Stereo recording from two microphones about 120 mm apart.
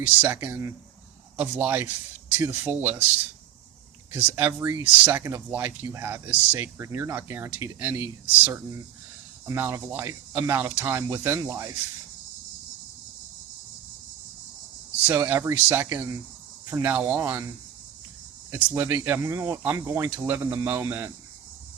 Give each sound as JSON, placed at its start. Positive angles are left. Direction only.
{"t": 0.1, "sound": "speech", "side_deg": -15}
{"t": 4.1, "sound": "speech", "side_deg": -15}
{"t": 9.5, "sound": "speech", "side_deg": -20}
{"t": 15.1, "sound": "speech", "side_deg": -25}
{"t": 18.5, "sound": "speech", "side_deg": -20}